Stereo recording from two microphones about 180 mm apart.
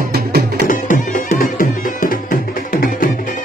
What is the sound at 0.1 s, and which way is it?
Music, 60° right (ahead or behind).